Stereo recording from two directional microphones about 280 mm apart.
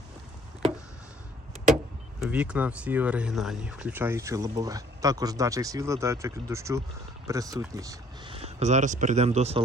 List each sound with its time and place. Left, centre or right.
2.2 s speech: centre; by 9.6 s right